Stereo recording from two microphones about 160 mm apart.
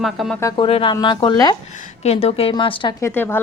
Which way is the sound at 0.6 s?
35° left (ahead or behind).